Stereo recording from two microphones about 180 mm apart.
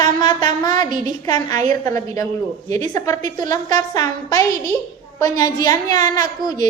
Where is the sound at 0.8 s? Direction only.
45° right (ahead or behind).